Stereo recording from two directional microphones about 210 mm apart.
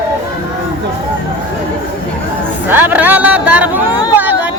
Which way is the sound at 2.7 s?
10° right (ahead or behind).